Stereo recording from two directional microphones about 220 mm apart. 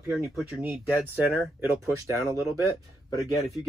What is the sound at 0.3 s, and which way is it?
Speech, 5° right (ahead or behind).